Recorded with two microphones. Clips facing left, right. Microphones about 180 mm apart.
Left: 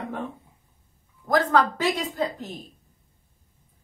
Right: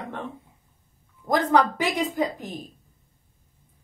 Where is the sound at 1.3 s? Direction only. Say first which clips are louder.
Right 1 dB; 15° right (ahead or behind).